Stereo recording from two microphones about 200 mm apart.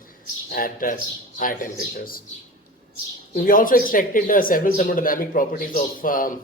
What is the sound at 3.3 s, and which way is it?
A man's voice, 45° left (ahead or behind).